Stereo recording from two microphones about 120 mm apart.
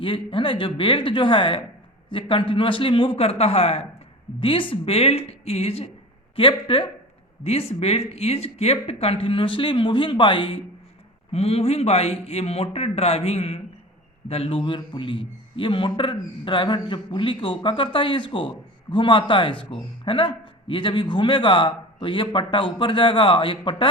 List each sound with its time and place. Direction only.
0.0 s a man's voice: 45° left (ahead or behind)
4.4 s a man's voice: 45° left (ahead or behind)
11.3 s a man's voice: 60° left (ahead or behind)